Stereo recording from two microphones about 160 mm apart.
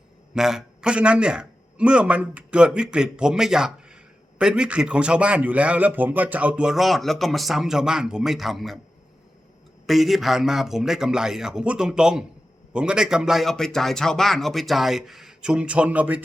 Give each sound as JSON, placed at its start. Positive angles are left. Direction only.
{"t": 0.3, "sound": "a man's voice", "side_deg": -5}
{"t": 9.8, "sound": "a man's voice", "side_deg": 0}